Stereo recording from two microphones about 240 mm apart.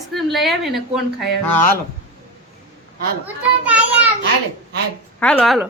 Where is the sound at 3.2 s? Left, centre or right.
Centre.